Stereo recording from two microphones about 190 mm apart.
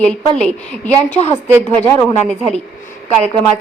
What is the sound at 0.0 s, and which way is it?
A woman's voice, 5° left (ahead or behind).